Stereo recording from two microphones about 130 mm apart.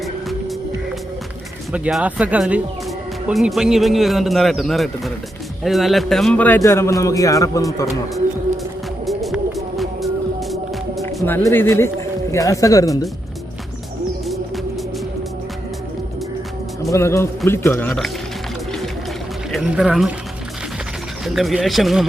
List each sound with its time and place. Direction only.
1.7 s a man's voice: 5° right (ahead or behind); by 6.6 s 10° left (ahead or behind)
6.6 s a man's voice: 20° left (ahead or behind)
9.0 s music: centre (ahead or behind)
11.3 s a man's voice: 15° left (ahead or behind)
16.9 s a man's voice: 20° left (ahead or behind)
19.5 s speech: centre (ahead or behind)
21.2 s a man's voice: centre (ahead or behind)